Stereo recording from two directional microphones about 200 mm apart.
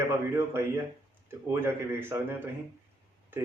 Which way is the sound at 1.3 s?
10° right (ahead or behind).